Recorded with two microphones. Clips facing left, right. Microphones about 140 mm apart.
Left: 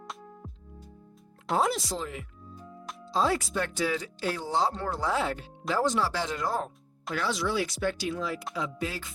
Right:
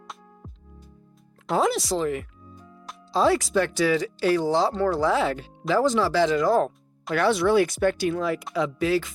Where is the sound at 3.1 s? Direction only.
75° right (ahead or behind).